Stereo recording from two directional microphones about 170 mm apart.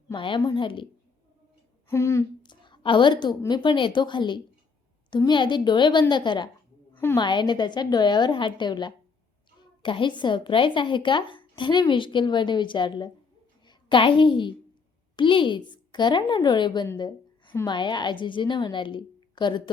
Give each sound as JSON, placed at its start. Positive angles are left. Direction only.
{"t": 0.1, "sound": "a woman's voice", "side_deg": 30}
{"t": 1.9, "sound": "a woman's voice", "side_deg": 15}
{"t": 17.0, "sound": "a sound", "side_deg": 25}
{"t": 17.7, "sound": "a woman's voice", "side_deg": 25}